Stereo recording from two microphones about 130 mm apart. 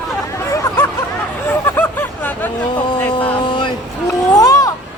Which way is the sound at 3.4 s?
35° left (ahead or behind).